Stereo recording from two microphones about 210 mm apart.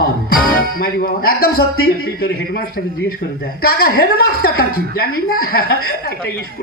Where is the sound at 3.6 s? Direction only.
45° left (ahead or behind).